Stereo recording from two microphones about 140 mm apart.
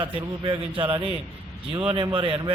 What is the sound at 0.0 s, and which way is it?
A man's voice, 35° right (ahead or behind).